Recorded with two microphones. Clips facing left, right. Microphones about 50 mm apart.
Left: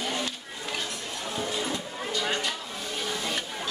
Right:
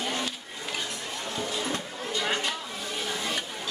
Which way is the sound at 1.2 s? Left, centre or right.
Centre.